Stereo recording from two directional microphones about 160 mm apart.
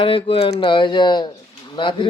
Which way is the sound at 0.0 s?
35° left (ahead or behind).